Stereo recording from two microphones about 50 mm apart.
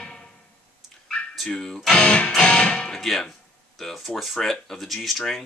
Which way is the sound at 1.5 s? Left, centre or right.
Centre.